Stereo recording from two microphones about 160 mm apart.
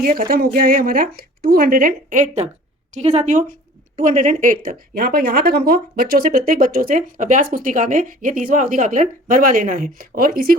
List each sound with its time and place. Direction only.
0.0 s a woman's voice: 65° right (ahead or behind)